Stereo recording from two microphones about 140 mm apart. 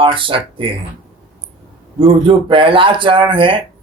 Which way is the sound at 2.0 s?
40° right (ahead or behind).